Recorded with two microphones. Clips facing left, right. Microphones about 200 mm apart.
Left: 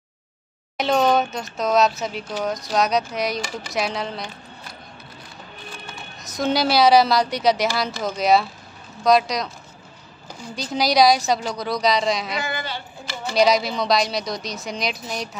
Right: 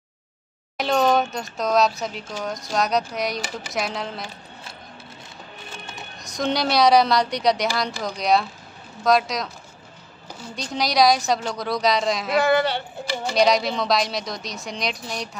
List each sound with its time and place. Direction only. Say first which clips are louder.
0.7 s speech: left 1 dB; centre (ahead or behind)
6.2 s speech: left 2 dB; centre (ahead or behind)
10.5 s speech: left 3 dB; centre (ahead or behind)
12.4 s speech: right 9 dB; 65° right (ahead or behind)
13.3 s speech: left 1 dB; centre (ahead or behind)